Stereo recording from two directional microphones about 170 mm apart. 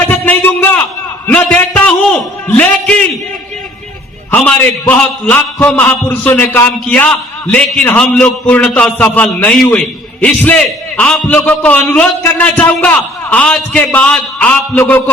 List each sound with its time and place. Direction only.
0.1 s a sound: 10° left (ahead or behind)
1.3 s a man's voice: 10° left (ahead or behind)
4.3 s a man's voice: 10° left (ahead or behind)